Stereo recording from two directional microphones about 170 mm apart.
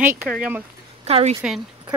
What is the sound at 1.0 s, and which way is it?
Speech, 35° right (ahead or behind).